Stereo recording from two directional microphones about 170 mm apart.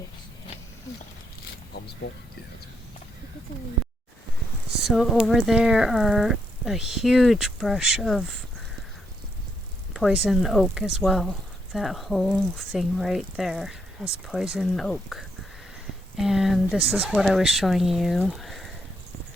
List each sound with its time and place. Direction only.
2.0 s speech: 90° left
4.8 s speech: centre (ahead or behind)
9.9 s speech: centre (ahead or behind)
18.3 s a sound: centre (ahead or behind)